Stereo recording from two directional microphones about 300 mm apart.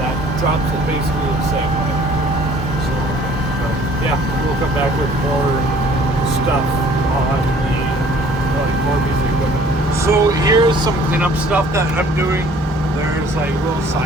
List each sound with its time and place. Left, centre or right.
10.1 s speech: centre